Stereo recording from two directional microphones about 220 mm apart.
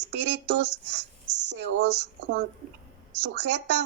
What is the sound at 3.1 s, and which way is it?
Speech, 50° right (ahead or behind).